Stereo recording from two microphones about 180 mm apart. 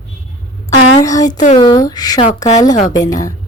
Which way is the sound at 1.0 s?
20° left (ahead or behind).